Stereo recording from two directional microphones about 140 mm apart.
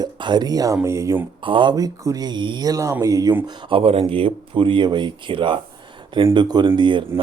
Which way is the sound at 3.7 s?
40° right (ahead or behind).